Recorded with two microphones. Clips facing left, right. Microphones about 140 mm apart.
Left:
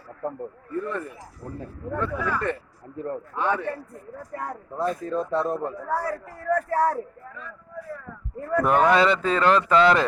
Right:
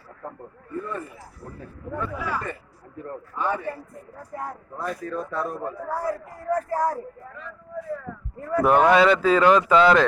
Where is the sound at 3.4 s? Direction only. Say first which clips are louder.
Left 1 dB; 85° left.